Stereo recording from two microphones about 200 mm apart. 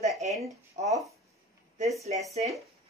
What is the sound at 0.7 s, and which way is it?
Speech, 35° right (ahead or behind).